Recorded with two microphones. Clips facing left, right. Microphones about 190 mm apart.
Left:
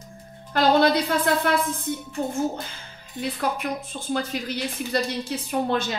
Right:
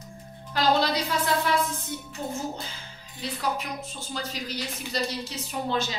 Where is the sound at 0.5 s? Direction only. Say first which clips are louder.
Left 5 dB; 55° left (ahead or behind).